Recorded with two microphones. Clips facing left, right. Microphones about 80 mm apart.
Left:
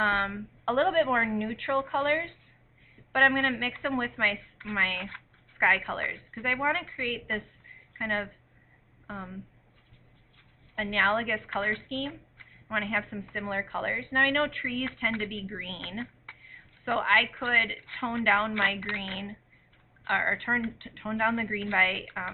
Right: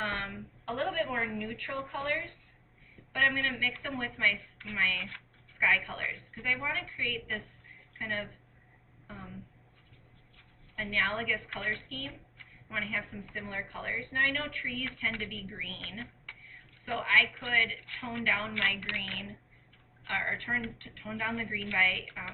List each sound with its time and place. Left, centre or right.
0.0 s a woman's voice: left
4.5 s a sound: left
4.8 s a woman's voice: left
5.0 s a sound: left
5.6 s a woman's voice: left
10.8 s a woman's voice: left